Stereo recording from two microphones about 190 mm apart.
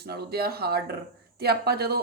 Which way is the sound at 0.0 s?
55° right (ahead or behind).